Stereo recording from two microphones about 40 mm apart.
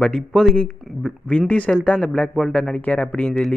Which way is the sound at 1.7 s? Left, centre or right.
Left.